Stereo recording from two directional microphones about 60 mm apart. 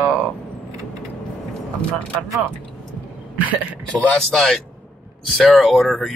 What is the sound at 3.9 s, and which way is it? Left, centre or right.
Speech, centre.